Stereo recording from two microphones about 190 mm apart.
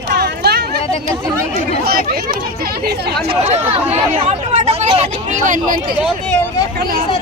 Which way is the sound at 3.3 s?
35° right (ahead or behind).